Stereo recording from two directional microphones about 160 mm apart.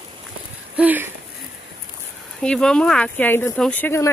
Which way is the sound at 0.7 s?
10° right (ahead or behind).